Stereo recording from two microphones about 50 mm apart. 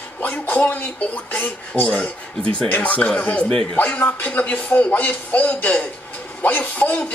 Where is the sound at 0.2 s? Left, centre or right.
Left.